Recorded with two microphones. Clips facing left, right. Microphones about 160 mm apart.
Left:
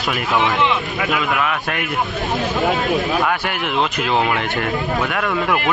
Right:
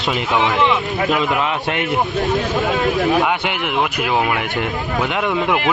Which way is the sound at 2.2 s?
Centre (ahead or behind).